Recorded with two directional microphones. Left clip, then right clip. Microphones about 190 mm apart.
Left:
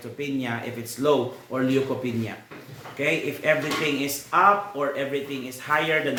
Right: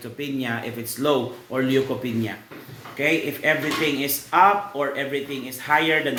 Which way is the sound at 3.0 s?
15° right (ahead or behind).